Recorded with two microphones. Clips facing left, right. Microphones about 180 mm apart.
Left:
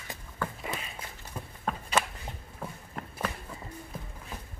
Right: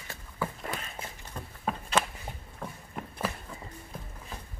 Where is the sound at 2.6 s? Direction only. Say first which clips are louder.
Even; 5° left (ahead or behind).